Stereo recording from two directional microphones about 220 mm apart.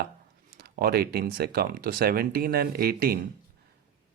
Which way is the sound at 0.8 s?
45° right (ahead or behind).